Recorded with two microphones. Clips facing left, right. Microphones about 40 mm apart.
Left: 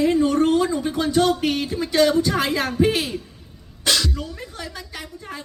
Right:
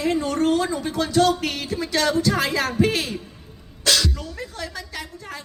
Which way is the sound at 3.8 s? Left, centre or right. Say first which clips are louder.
Even; centre.